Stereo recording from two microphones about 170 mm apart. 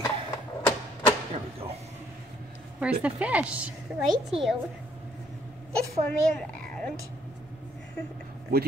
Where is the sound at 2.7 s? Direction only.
5° right (ahead or behind).